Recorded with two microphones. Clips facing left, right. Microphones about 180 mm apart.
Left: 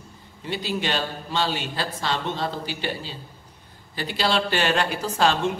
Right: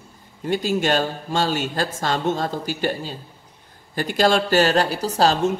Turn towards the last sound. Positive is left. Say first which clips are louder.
# right 3 dB
turn(degrees=-40)  # may be behind; listen again after turning